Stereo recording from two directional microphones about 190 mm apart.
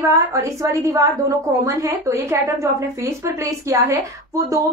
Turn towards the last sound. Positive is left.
turn(degrees=-15)  # may be behind; listen again after turning